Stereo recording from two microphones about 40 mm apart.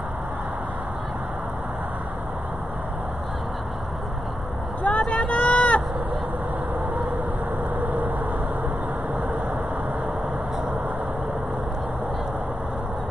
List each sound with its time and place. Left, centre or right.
4.8 s vehicle: left
7.8 s vehicle: right